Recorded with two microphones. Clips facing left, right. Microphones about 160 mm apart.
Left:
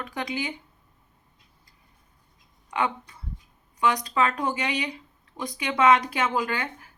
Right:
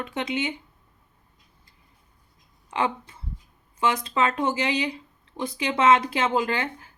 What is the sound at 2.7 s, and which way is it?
Speech, 25° right (ahead or behind).